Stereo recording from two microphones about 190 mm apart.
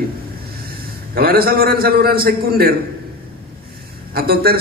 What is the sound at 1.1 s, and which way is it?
A man's voice, 50° right (ahead or behind).